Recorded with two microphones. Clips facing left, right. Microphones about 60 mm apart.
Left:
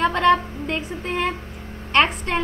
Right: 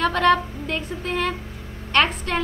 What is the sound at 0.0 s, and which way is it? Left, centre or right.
A woman's voice, centre.